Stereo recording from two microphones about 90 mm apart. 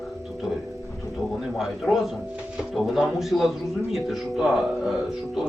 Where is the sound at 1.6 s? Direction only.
Centre (ahead or behind).